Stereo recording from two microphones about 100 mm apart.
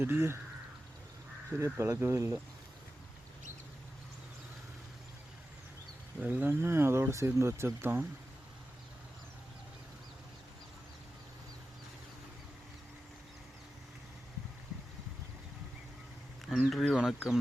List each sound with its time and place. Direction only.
0.0 s speech: 25° right (ahead or behind)
1.5 s speech: 30° right (ahead or behind)
6.1 s speech: 15° right (ahead or behind)
16.6 s speech: 5° left (ahead or behind)